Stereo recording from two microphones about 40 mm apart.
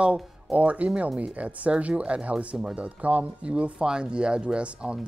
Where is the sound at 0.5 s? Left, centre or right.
Right.